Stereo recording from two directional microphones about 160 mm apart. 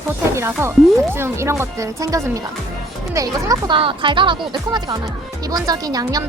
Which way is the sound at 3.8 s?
35° right (ahead or behind).